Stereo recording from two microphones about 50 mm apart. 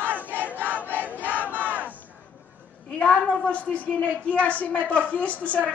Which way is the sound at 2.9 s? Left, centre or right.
Left.